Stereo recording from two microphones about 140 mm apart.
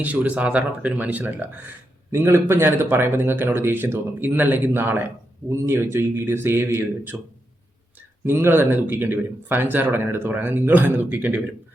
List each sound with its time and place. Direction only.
0.0 s speech: 10° right (ahead or behind)
8.2 s speech: 15° right (ahead or behind)